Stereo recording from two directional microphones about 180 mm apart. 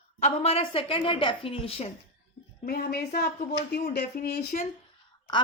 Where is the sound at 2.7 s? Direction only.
60° left (ahead or behind).